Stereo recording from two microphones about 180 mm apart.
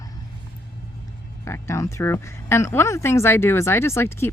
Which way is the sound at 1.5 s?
15° left (ahead or behind).